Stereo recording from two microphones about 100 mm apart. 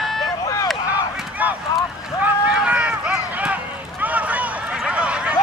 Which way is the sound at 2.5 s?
10° right (ahead or behind).